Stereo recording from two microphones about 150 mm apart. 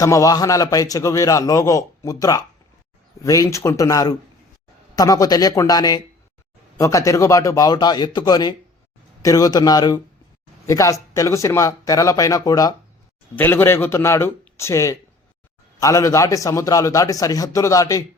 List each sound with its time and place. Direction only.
0.0 s a man's voice: 20° left (ahead or behind)